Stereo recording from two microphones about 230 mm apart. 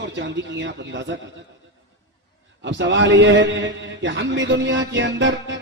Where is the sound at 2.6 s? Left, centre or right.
Right.